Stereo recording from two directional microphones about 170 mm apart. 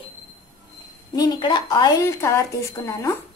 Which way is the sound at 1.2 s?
25° left (ahead or behind).